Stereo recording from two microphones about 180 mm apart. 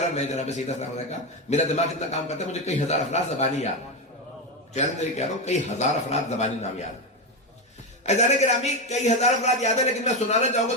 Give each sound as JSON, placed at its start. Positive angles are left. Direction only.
{"t": 0.1, "sound": "a man's voice", "side_deg": 40}
{"t": 4.7, "sound": "a man's voice", "side_deg": 40}
{"t": 8.0, "sound": "a man's voice", "side_deg": 40}